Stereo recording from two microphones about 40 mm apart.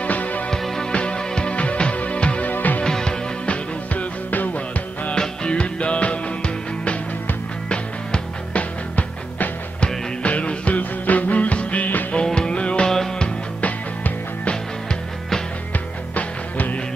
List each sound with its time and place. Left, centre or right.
0.0 s music: left
0.5 s music: centre
0.9 s music: left
2.5 s music: left
2.8 s music: centre
3.4 s music: left
5.1 s music: left
10.2 s music: left
12.3 s music: left
12.9 s music: centre
13.6 s music: left
16.2 s music: left